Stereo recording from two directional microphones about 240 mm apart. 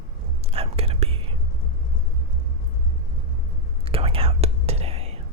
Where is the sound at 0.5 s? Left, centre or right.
Right.